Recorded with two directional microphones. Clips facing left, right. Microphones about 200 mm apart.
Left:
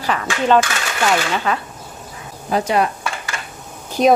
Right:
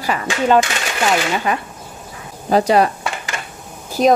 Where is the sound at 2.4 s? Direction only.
35° right (ahead or behind).